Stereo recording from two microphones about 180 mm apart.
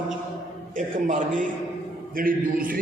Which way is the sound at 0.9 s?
45° right (ahead or behind).